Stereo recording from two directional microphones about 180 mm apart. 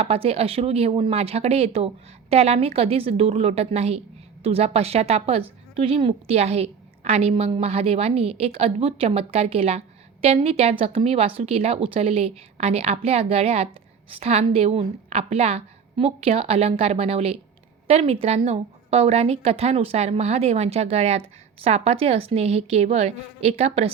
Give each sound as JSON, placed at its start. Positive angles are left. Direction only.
{"t": 0.0, "sound": "a woman's voice", "side_deg": -35}